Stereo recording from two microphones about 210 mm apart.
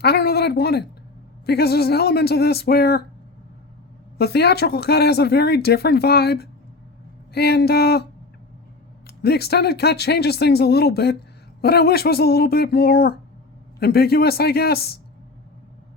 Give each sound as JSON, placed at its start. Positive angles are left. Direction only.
{"t": 0.0, "sound": "a sound", "side_deg": 50}
{"t": 1.5, "sound": "speech", "side_deg": 50}
{"t": 4.2, "sound": "speech", "side_deg": 50}
{"t": 9.0, "sound": "speech", "side_deg": 50}